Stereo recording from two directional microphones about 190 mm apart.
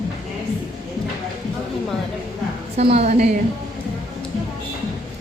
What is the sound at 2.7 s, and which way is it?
Speech, 30° right (ahead or behind).